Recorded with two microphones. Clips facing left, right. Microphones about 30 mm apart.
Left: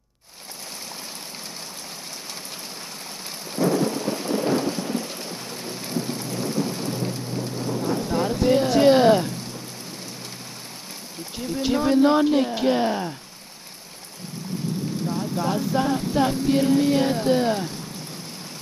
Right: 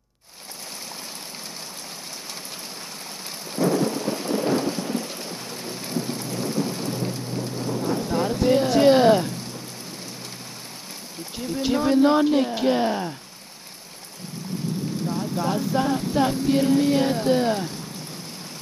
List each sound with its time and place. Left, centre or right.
3.3 s thunder: centre
5.9 s rain: centre
11.3 s speech: centre
15.0 s speech: centre